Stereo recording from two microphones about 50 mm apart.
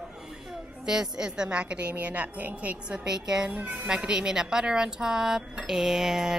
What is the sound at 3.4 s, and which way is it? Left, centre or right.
A woman's voice, right.